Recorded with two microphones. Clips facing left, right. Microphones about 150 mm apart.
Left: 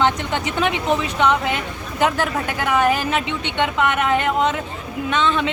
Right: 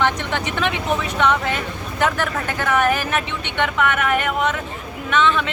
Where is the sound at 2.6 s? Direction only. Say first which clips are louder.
Left 1 dB; 15° left (ahead or behind).